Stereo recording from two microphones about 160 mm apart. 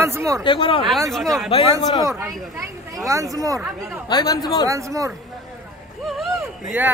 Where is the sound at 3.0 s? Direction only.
20° right (ahead or behind).